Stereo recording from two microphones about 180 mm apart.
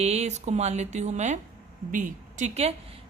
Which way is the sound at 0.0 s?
35° right (ahead or behind).